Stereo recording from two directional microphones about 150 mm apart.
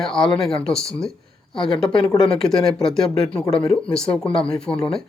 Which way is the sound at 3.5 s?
40° left (ahead or behind).